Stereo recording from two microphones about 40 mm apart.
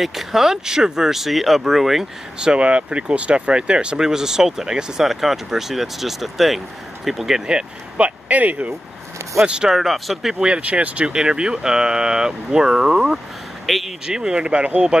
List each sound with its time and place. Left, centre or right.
0.0 s speech: centre
2.3 s speech: right
4.0 s speech: centre
7.4 s speech: right
8.3 s speech: right
9.4 s speech: right
9.7 s speech: centre
10.6 s speech: right
11.1 s speech: right
13.7 s speech: centre
14.0 s speech: centre